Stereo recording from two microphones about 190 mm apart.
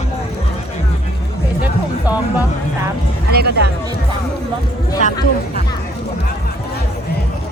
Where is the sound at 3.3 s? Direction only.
55° right (ahead or behind).